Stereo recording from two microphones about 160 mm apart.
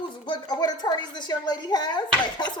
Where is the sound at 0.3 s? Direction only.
25° left (ahead or behind).